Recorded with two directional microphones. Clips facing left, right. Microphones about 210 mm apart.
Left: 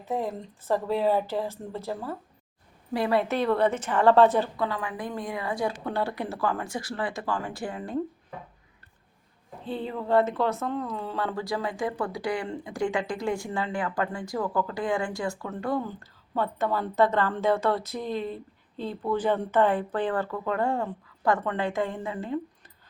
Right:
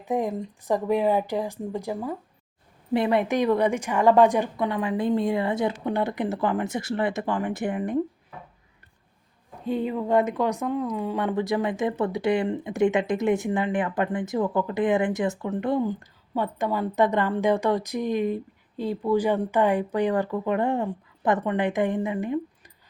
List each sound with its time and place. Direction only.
0.0 s speech: 15° right (ahead or behind)
9.6 s speech: 10° right (ahead or behind)